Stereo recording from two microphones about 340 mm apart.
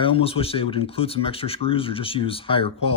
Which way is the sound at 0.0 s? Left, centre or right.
Centre.